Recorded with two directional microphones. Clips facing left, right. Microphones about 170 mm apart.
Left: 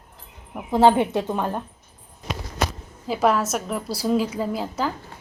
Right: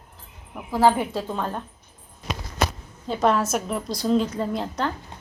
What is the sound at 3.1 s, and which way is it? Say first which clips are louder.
A woman's voice: left 1 dB; 5° left (ahead or behind).